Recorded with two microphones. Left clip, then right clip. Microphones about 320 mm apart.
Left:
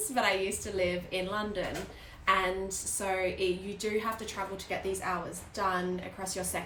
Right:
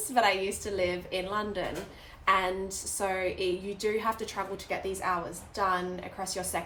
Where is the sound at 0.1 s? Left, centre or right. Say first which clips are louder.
Right 3 dB; centre.